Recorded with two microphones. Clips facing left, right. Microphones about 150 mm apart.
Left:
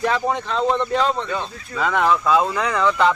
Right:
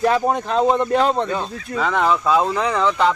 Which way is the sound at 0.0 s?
40° right (ahead or behind).